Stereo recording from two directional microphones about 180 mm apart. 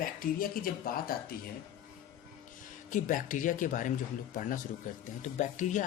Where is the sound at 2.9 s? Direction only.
45° left (ahead or behind).